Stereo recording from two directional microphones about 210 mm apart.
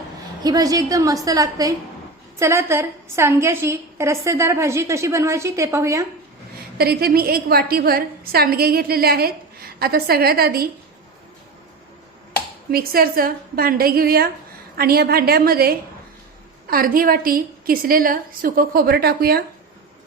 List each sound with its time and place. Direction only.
0.4 s a woman's voice: 15° right (ahead or behind)
6.7 s a woman's voice: 45° right (ahead or behind)
12.7 s a woman's voice: 45° right (ahead or behind)